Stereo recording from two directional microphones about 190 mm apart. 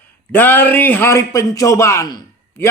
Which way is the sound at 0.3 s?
10° left (ahead or behind).